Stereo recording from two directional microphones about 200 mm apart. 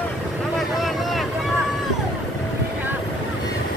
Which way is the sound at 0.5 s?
Centre (ahead or behind).